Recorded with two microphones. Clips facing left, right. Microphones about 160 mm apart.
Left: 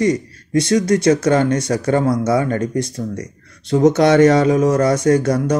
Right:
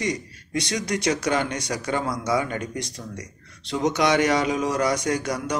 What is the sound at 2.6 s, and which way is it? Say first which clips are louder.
Speech: left 11 dB; 20° right (ahead or behind).